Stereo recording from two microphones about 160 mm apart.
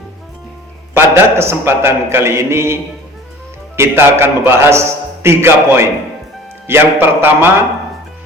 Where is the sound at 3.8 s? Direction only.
15° right (ahead or behind).